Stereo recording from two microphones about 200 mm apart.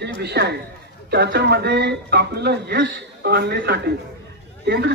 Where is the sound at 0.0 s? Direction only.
55° right (ahead or behind).